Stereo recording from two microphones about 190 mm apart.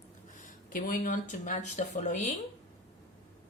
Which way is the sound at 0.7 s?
45° left (ahead or behind).